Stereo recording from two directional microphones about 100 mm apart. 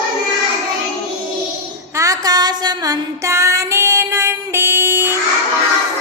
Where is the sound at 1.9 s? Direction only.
35° right (ahead or behind).